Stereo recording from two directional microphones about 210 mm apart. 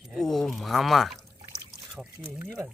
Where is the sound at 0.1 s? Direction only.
Centre (ahead or behind).